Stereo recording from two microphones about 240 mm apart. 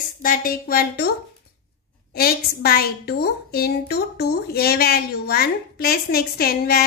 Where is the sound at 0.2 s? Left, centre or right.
Left.